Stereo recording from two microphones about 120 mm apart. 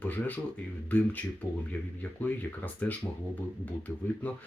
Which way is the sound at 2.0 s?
15° left (ahead or behind).